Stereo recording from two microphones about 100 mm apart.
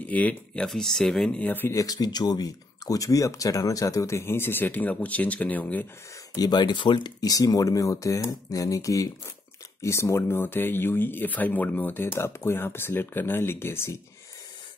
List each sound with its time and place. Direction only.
0.0 s speech: 15° left (ahead or behind)
0.7 s speech: 5° left (ahead or behind)
1.4 s speech: 20° left (ahead or behind)
1.8 s speech: 40° left (ahead or behind); by 5.9 s 15° left (ahead or behind)
6.4 s speech: 45° left (ahead or behind); by 13.9 s 25° left (ahead or behind)